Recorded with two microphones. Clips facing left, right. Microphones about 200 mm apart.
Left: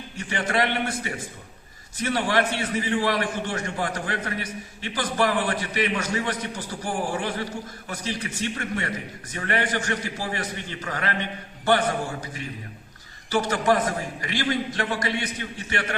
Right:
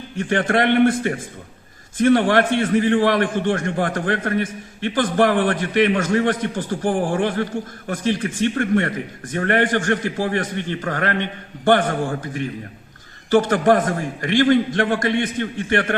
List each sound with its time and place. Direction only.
0.2 s a man's voice: 50° right (ahead or behind)